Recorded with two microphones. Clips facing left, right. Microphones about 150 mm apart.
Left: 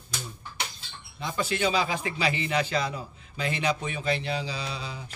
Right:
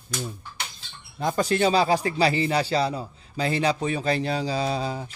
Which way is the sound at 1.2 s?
40° right (ahead or behind).